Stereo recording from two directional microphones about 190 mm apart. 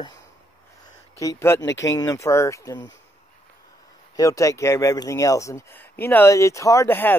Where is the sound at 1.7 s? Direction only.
70° left (ahead or behind).